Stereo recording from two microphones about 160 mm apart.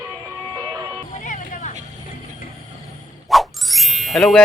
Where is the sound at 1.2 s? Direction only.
50° left (ahead or behind).